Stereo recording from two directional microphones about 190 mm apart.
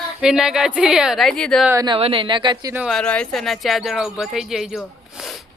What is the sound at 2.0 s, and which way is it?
Speech, 30° right (ahead or behind).